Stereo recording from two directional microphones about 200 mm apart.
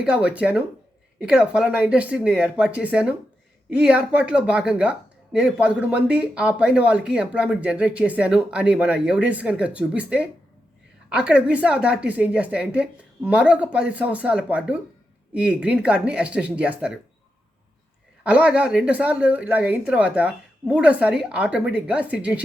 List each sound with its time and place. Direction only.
0.0 s a woman's voice: 5° right (ahead or behind)
18.2 s a woman's voice: 5° right (ahead or behind)